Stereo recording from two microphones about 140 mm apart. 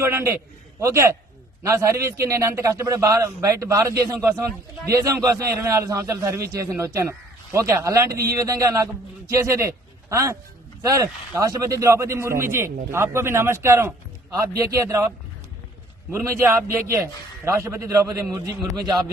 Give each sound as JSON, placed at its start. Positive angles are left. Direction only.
{"t": 0.0, "sound": "a man's voice", "side_deg": -15}
{"t": 16.1, "sound": "a man's voice", "side_deg": -20}